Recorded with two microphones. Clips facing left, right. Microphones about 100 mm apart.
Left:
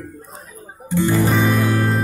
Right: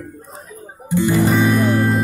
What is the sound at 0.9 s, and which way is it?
Guitar, 15° right (ahead or behind).